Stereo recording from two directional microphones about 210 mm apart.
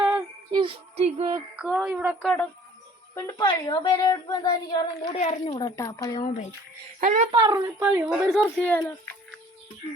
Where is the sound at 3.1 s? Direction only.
15° left (ahead or behind).